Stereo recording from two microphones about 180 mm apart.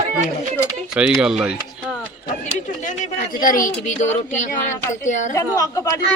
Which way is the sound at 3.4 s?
50° left (ahead or behind).